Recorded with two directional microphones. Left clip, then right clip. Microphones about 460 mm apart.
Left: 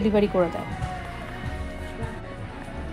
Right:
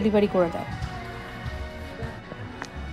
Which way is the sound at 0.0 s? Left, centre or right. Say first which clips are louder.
Even; centre.